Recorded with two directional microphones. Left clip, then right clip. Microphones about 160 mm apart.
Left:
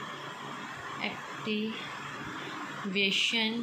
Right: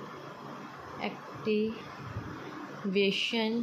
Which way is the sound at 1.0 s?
55° right (ahead or behind).